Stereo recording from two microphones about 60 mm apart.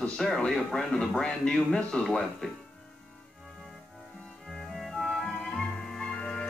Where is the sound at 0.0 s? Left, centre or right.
Centre.